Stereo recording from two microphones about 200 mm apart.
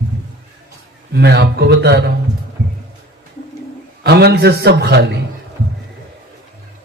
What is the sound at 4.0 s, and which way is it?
A man's voice, 55° right (ahead or behind).